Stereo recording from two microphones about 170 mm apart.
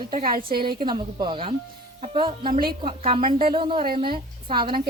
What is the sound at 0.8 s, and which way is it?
A woman's voice, 30° right (ahead or behind).